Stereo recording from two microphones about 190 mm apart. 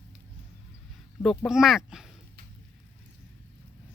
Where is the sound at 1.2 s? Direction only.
Centre (ahead or behind).